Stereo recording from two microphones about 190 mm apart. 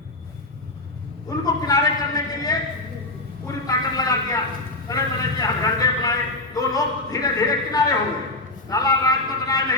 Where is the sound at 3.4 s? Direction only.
20° left (ahead or behind).